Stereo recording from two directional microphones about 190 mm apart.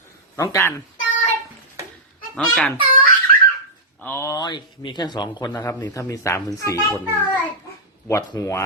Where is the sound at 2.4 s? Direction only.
5° left (ahead or behind).